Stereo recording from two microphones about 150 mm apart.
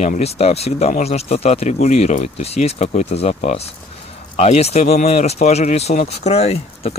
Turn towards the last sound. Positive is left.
turn(degrees=45)  # may be behind; listen again after turning